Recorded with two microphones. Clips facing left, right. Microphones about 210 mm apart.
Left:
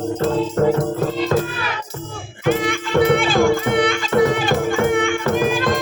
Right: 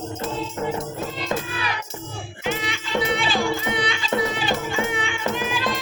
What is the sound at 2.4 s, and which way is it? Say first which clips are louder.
Music: left 9 dB; 50° left (ahead or behind).